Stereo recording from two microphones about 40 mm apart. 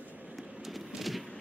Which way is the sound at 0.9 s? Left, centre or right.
Centre.